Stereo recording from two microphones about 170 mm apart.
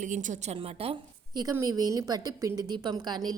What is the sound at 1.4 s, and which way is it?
A woman's voice, 20° right (ahead or behind).